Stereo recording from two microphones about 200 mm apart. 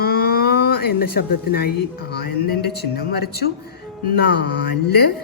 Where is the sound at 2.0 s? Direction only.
55° left (ahead or behind).